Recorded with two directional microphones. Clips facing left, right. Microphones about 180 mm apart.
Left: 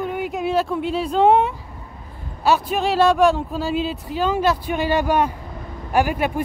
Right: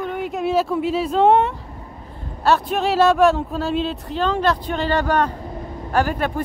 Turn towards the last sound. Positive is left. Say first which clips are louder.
# left 1 dB
turn(degrees=10)  # may be behind; listen again after turning